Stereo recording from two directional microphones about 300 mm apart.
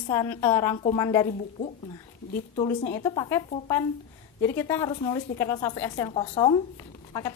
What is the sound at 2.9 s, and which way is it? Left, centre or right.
Speech, centre.